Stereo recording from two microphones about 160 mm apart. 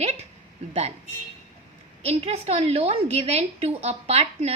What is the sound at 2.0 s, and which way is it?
A woman's voice, 40° right (ahead or behind).